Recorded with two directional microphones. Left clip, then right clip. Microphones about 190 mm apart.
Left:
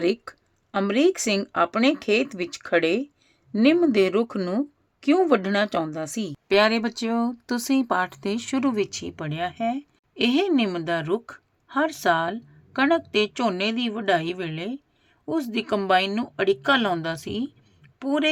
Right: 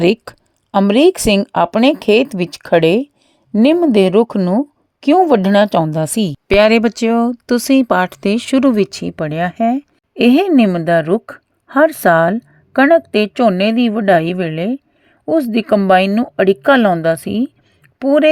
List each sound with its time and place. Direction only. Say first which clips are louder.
0.0 s a woman's voice: right 10 dB; 40° right (ahead or behind)